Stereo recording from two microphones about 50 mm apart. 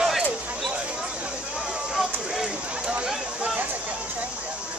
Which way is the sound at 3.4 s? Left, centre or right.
Right.